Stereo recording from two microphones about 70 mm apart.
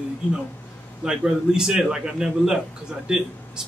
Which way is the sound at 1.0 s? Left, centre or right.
Centre.